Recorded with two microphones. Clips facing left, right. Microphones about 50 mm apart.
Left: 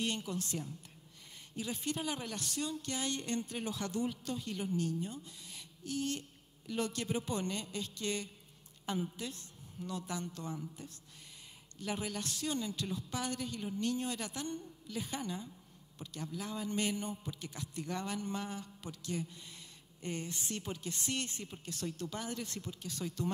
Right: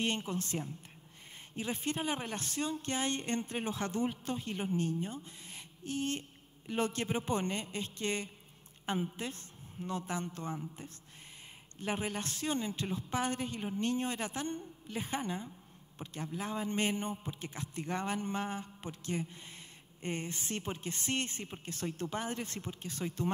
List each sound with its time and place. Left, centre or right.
0.0 s a man's voice: right